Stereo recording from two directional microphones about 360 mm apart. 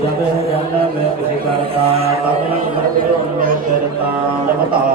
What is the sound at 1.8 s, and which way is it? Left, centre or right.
Speech, centre.